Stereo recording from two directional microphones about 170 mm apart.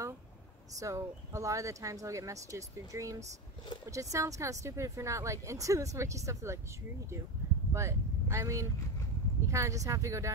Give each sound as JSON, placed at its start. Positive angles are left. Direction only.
{"t": 0.7, "sound": "speech", "side_deg": -20}
{"t": 7.7, "sound": "speech", "side_deg": -15}